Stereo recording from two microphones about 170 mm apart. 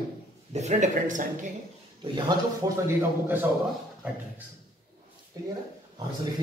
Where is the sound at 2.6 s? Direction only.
25° right (ahead or behind).